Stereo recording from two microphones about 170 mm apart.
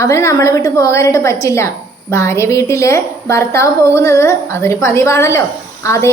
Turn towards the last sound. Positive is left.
turn(degrees=15)  # may be behind; listen again after turning